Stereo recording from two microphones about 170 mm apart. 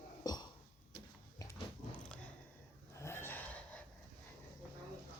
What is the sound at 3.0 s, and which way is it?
Gasp, 15° left (ahead or behind).